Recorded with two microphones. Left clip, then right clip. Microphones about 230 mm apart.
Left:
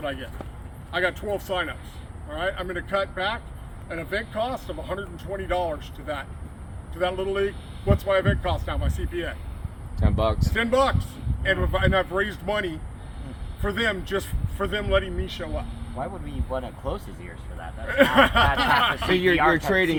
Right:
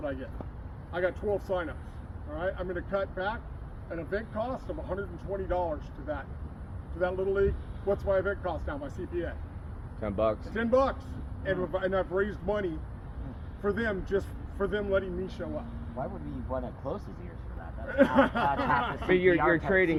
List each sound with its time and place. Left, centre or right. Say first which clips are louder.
0.0 s speech: left 5 dB; centre
10.0 s speech: left 3 dB; left
10.5 s speech: left 7 dB; centre
16.0 s speech: left 5 dB; centre
16.5 s speech: left 5 dB; centre
19.1 s speech: left 2 dB; left